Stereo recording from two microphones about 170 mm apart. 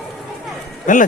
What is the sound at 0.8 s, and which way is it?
Speech, 50° left (ahead or behind).